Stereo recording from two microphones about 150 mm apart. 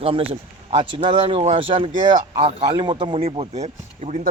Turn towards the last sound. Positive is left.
turn(degrees=-45)  # may be behind; listen again after turning